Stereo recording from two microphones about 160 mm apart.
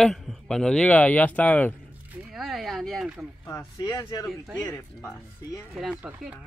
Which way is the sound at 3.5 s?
20° left (ahead or behind).